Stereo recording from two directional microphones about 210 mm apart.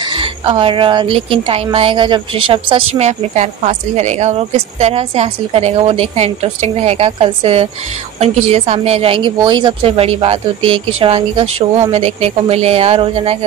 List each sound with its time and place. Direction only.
0.0 s a woman's voice: 25° right (ahead or behind)